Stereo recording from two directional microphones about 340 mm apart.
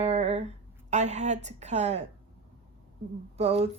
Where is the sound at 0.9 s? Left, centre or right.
Centre.